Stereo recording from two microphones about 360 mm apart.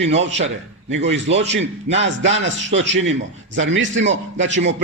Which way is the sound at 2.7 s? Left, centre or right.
Right.